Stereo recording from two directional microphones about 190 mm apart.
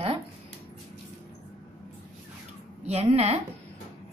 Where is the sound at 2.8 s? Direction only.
35° right (ahead or behind).